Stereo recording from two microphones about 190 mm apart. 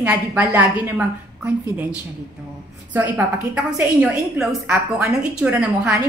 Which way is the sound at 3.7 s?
5° right (ahead or behind).